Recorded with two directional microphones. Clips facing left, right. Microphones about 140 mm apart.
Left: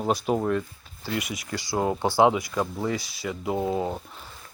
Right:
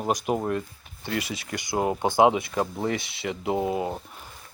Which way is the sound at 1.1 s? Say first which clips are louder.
Even; 30° right (ahead or behind).